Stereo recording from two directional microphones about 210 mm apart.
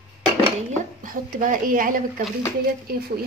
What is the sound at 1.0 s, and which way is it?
Speech, 40° right (ahead or behind).